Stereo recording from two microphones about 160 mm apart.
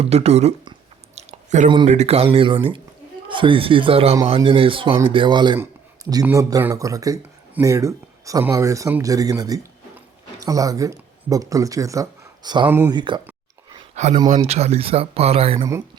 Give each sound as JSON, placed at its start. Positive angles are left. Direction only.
{"t": 0.0, "sound": "speech", "side_deg": -40}
{"t": 1.1, "sound": "chewing", "side_deg": -45}
{"t": 1.9, "sound": "speech", "side_deg": -40}
{"t": 6.2, "sound": "speech", "side_deg": -15}
{"t": 12.6, "sound": "speech", "side_deg": -10}
{"t": 12.9, "sound": "speech", "side_deg": -30}
{"t": 13.9, "sound": "speech", "side_deg": -45}